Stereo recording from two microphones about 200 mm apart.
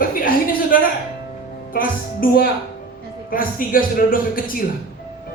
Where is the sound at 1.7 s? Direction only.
45° left (ahead or behind).